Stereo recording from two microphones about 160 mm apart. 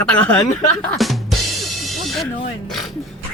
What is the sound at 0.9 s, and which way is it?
Speech, centre (ahead or behind).